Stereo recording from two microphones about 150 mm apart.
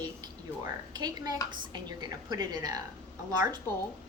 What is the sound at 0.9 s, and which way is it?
A woman's voice, 25° right (ahead or behind).